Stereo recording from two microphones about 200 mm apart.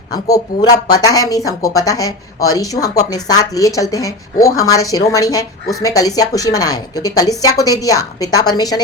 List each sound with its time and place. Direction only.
0.1 s speech: 20° left (ahead or behind)